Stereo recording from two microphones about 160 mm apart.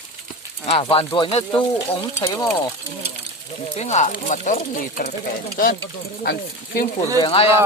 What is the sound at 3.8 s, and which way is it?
Speech, 45° left (ahead or behind).